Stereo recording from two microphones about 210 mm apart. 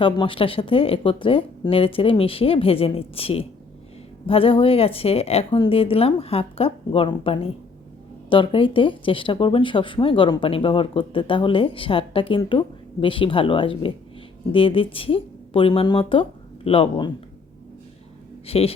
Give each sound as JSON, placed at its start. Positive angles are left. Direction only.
{"t": 0.0, "sound": "speech", "side_deg": 25}
{"t": 18.4, "sound": "speech", "side_deg": 30}